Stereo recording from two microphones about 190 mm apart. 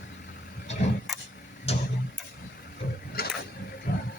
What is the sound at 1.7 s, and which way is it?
Tick-tock, 35° left (ahead or behind).